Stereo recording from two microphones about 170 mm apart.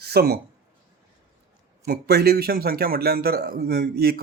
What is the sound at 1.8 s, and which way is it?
A man's voice, 65° right (ahead or behind).